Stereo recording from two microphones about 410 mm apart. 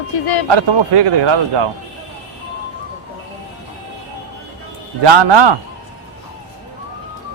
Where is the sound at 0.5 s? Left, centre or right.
Right.